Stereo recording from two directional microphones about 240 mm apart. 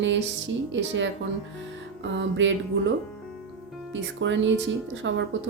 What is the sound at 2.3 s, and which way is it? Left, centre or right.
Speech, right.